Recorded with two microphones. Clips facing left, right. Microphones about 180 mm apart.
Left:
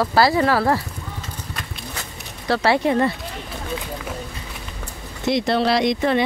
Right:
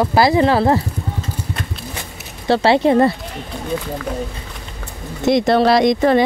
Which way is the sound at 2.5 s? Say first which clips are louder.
Right 5 dB; 25° right (ahead or behind).